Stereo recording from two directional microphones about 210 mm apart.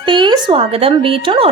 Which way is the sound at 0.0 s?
20° right (ahead or behind).